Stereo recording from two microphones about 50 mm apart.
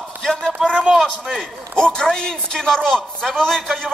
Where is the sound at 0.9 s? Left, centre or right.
Centre.